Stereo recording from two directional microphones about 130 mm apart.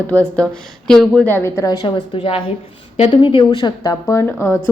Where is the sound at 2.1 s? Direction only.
45° left (ahead or behind); by 4.3 s 25° left (ahead or behind).